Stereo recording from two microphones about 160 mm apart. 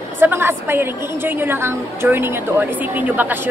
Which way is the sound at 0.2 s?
15° right (ahead or behind).